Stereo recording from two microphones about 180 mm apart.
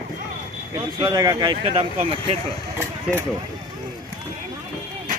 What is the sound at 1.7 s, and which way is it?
Speech, 35° right (ahead or behind).